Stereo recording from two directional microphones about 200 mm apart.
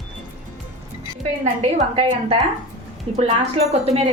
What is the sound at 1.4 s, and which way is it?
A woman's voice, 35° right (ahead or behind).